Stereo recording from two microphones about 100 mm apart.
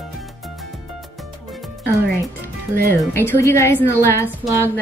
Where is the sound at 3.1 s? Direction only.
25° left (ahead or behind).